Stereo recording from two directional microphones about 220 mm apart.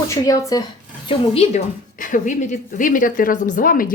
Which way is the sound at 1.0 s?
25° left (ahead or behind).